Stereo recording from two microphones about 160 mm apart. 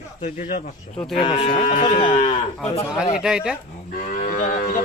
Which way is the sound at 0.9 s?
Centre (ahead or behind).